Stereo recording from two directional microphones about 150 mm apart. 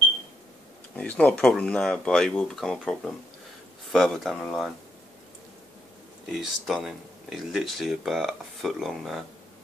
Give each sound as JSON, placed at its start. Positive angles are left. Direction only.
{"t": 0.9, "sound": "speech", "side_deg": 10}
{"t": 6.2, "sound": "speech", "side_deg": 0}